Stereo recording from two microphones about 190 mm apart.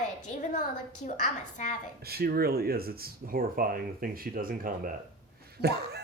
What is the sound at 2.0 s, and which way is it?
Speech, 55° right (ahead or behind).